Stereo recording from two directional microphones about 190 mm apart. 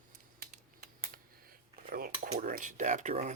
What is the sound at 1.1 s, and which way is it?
Cutlery, 50° right (ahead or behind).